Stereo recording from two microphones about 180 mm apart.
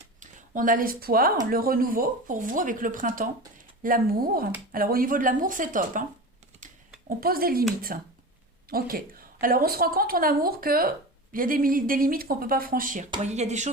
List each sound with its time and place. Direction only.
0.2 s a woman's voice: 50° right (ahead or behind)
7.2 s a woman's voice: 55° right (ahead or behind); by 13.7 s 40° right (ahead or behind)